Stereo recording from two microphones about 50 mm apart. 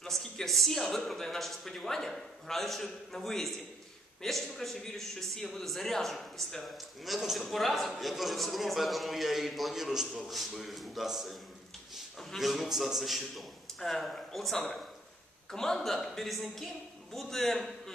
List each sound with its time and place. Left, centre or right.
0.0 s a man's voice: centre